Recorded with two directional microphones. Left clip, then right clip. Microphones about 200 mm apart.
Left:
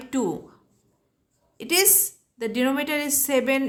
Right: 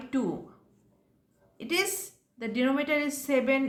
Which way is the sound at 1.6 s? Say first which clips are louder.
Left 7 dB; 30° left (ahead or behind).